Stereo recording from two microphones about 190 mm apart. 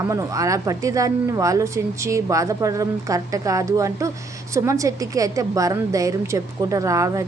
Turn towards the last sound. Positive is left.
turn(degrees=-15)  # may be behind; listen again after turning